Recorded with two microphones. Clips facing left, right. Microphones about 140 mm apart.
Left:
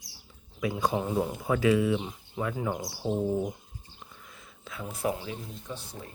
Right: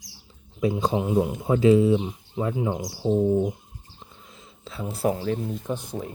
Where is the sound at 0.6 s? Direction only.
25° right (ahead or behind).